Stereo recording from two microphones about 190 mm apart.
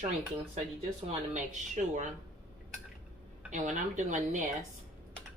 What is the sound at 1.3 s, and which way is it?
Speech, 40° right (ahead or behind).